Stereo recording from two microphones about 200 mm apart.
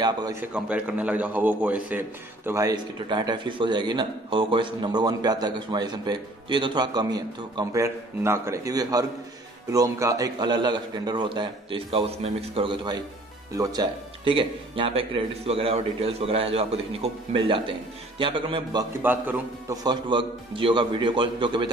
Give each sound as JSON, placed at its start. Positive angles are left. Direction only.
{"t": 0.0, "sound": "a man's voice", "side_deg": -20}
{"t": 0.4, "sound": "a man's voice", "side_deg": -5}
{"t": 19.0, "sound": "a man's voice", "side_deg": -10}
{"t": 19.8, "sound": "a man's voice", "side_deg": -20}